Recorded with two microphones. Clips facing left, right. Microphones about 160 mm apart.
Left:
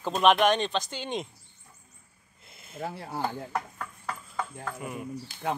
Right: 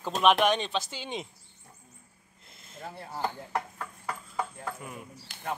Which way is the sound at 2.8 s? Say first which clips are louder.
Left 6 dB; 90° left.